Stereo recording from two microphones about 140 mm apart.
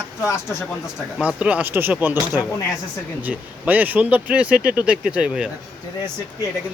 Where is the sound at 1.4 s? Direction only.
10° right (ahead or behind).